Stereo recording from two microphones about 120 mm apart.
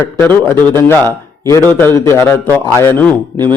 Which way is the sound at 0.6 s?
35° right (ahead or behind).